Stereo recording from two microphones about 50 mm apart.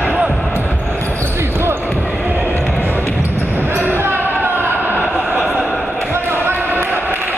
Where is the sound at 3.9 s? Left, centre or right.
Right.